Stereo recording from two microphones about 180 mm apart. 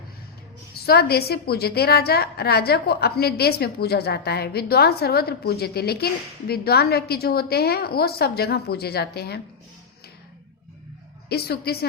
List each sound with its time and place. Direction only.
0.7 s a woman's voice: 60° left (ahead or behind)
11.3 s a woman's voice: 60° left (ahead or behind)